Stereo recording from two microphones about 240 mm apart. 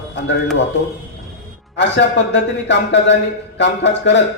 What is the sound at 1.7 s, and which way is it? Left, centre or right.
A man's voice, left.